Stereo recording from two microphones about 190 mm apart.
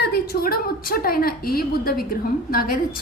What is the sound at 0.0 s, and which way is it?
A woman's voice, 55° left (ahead or behind).